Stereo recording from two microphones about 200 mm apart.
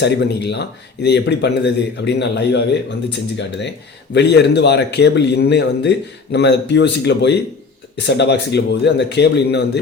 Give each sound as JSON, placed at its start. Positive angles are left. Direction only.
{"t": 0.0, "sound": "a man's voice", "side_deg": 60}